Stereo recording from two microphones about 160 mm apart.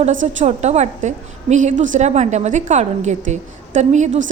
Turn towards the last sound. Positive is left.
turn(degrees=-45)  # may be behind; listen again after turning